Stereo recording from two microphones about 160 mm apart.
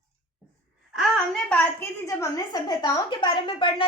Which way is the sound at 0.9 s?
5° left (ahead or behind).